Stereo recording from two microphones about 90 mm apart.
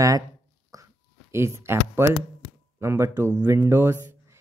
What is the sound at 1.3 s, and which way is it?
Speech, 30° right (ahead or behind).